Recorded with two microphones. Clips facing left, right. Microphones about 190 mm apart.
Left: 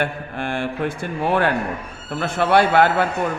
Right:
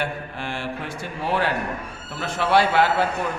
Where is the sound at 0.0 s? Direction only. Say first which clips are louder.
Left 4 dB; 55° left (ahead or behind).